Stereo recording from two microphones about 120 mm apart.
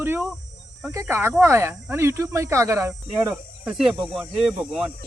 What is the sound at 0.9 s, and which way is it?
Speech, 20° right (ahead or behind).